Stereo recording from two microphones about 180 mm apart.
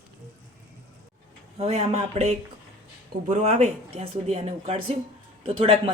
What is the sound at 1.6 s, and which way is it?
Speech, 35° right (ahead or behind).